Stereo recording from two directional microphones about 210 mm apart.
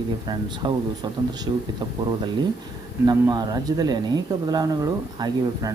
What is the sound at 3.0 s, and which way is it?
Speech, 20° right (ahead or behind).